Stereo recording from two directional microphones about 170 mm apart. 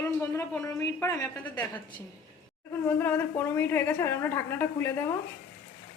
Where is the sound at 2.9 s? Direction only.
10° left (ahead or behind).